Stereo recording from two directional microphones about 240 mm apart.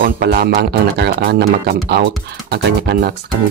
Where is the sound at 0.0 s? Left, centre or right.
Right.